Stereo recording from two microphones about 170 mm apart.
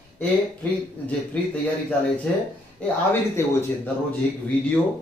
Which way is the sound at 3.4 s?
15° left (ahead or behind).